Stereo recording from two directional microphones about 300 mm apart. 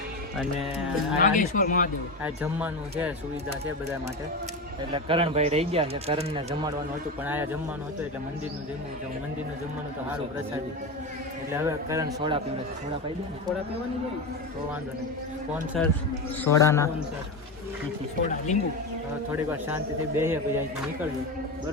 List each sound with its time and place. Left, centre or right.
1.2 s speech: left
2.2 s speech: centre
4.9 s speech: centre
11.5 s a man's voice: centre
15.7 s a man's voice: centre
19.3 s a man's voice: centre